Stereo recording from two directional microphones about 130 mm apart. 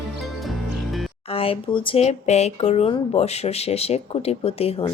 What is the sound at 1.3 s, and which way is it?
Speech, 45° left (ahead or behind).